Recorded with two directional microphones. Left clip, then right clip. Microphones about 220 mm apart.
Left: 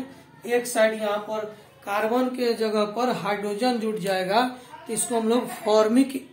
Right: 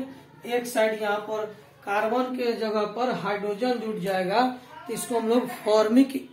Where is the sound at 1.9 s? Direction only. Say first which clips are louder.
Left 1 dB; 45° left (ahead or behind).